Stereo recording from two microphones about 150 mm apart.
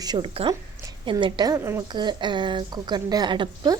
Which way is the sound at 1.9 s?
30° right (ahead or behind).